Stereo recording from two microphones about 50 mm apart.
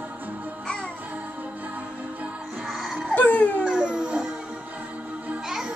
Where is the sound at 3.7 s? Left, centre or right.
Centre.